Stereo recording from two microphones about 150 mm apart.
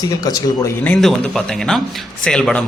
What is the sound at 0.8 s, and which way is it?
A man's voice, 5° left (ahead or behind).